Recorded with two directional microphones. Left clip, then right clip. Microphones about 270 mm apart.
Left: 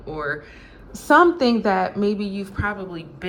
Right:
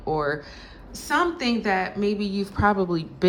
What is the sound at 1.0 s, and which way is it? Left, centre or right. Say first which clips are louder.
A woman's voice: left 8 dB; centre.